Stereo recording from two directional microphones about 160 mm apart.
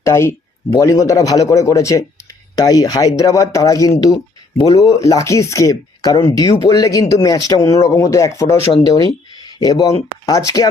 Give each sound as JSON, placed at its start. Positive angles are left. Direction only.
{"t": 0.0, "sound": "speech", "side_deg": 15}